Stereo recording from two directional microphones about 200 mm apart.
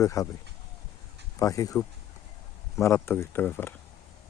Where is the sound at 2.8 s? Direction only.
15° left (ahead or behind).